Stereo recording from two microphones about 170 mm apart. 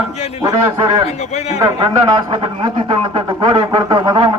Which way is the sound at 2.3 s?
30° right (ahead or behind).